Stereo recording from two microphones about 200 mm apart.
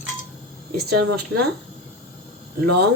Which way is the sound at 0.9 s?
55° right (ahead or behind).